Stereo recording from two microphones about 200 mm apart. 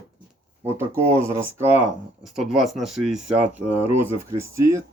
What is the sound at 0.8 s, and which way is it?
Speech, 15° right (ahead or behind).